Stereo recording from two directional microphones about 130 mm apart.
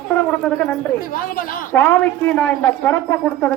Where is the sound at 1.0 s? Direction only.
90° left.